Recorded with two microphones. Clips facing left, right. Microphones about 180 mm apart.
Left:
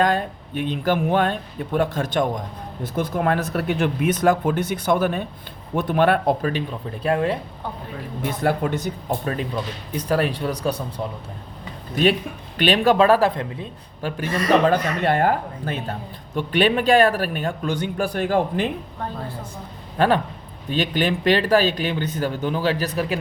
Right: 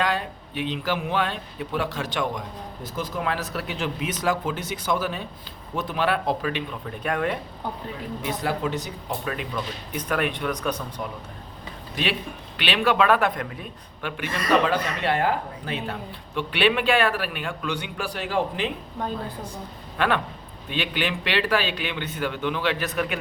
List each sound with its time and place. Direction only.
0.0 s a man's voice: 45° left (ahead or behind); by 7.3 s 30° left (ahead or behind)
8.2 s speech: 50° left (ahead or behind)
9.2 s a man's voice: 35° left (ahead or behind)
12.5 s a man's voice: 45° left (ahead or behind); by 14.1 s 25° left (ahead or behind)
14.2 s speech: 45° left (ahead or behind)
20.0 s a man's voice: 40° left (ahead or behind)